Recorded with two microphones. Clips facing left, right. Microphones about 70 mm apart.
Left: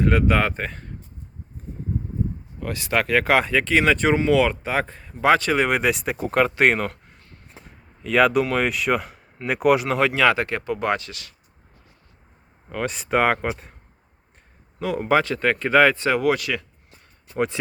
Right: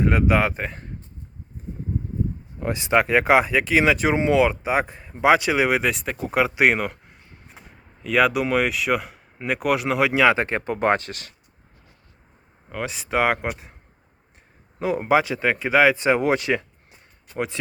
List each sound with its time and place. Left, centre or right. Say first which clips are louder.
0.0 s speech: even; centre
2.6 s speech: right 4 dB; right
7.6 s a sound: left 1 dB; centre
8.4 s speech: right 1 dB; centre
10.2 s speech: right 1 dB; right
12.6 s speech: left 2 dB; centre
14.8 s speech: right 1 dB; right
17.3 s speech: left 4 dB; centre